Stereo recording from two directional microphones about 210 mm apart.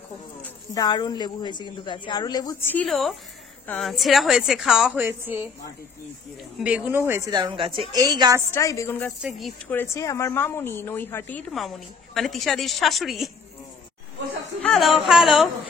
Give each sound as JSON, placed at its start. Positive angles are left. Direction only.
{"t": 0.4, "sound": "a woman's voice", "side_deg": 20}
{"t": 6.6, "sound": "speech", "side_deg": -5}
{"t": 8.5, "sound": "speech", "side_deg": 15}
{"t": 14.6, "sound": "speech", "side_deg": 0}